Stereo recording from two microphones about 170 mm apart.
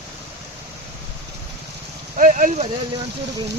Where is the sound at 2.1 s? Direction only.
50° right (ahead or behind).